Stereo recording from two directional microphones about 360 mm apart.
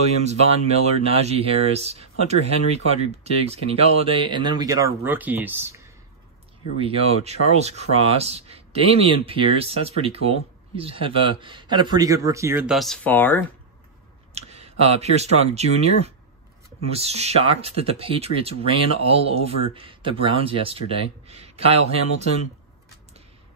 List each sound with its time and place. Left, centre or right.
0.2 s speech: centre
6.8 s speech: centre
14.3 s speech: centre